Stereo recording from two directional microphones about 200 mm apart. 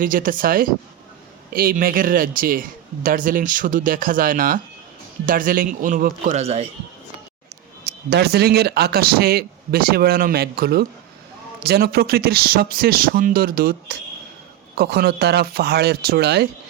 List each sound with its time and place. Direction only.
0.0 s speech: 45° right (ahead or behind)
7.9 s speech: 55° right (ahead or behind)